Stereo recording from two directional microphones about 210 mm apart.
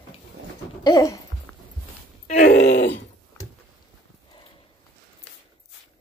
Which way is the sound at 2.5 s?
50° left (ahead or behind).